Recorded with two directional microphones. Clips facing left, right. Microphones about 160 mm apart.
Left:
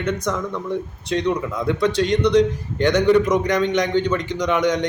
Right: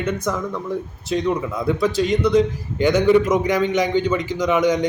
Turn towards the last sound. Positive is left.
turn(degrees=-5)  # may be behind; listen again after turning